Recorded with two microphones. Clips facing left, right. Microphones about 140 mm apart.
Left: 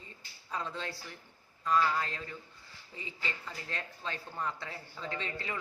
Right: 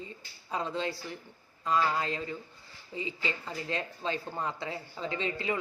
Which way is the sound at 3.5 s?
20° right (ahead or behind).